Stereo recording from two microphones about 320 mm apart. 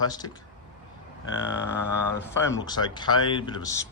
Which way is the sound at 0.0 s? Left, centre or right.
Centre.